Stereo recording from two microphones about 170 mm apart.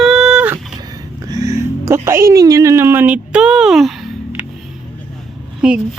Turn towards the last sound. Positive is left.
turn(degrees=-5)  # may be behind; listen again after turning